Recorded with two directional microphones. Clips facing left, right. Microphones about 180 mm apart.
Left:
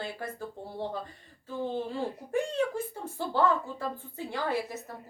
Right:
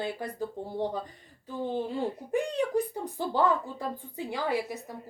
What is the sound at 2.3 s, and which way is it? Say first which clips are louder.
Speech: left 1 dB; 15° right (ahead or behind).